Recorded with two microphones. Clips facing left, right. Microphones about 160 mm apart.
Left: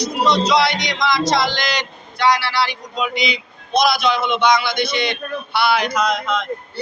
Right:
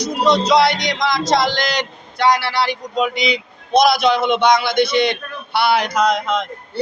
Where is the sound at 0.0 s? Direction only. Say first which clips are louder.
Right 1 dB; 50° right (ahead or behind).